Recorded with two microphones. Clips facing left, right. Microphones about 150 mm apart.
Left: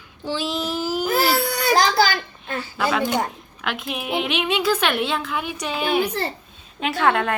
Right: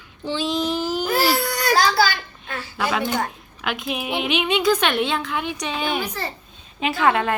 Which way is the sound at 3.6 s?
Centre (ahead or behind).